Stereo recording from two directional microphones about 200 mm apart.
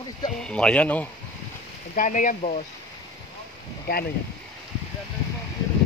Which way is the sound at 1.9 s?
40° left (ahead or behind).